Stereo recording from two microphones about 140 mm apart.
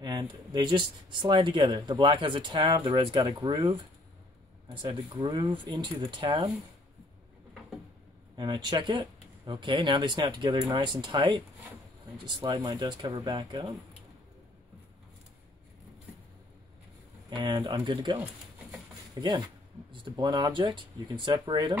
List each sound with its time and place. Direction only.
0.0 s speech: 30° right (ahead or behind)
8.4 s speech: 30° right (ahead or behind)
17.3 s speech: 30° right (ahead or behind)